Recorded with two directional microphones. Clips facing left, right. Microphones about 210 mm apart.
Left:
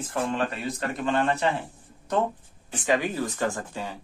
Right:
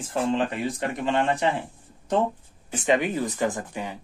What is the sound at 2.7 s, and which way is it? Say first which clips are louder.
Speech: right 2 dB; 20° right (ahead or behind).